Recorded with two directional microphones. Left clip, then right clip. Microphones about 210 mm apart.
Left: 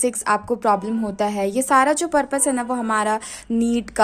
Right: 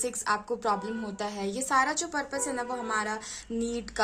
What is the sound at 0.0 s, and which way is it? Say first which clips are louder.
Speech: left 9 dB; 35° left (ahead or behind).